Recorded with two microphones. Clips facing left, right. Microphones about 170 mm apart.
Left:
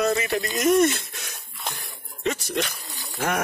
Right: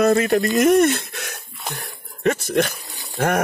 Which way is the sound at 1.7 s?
60° right (ahead or behind).